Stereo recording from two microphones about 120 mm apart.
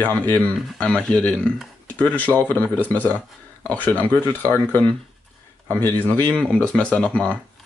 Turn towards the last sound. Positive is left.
turn(degrees=10)  # may be behind; listen again after turning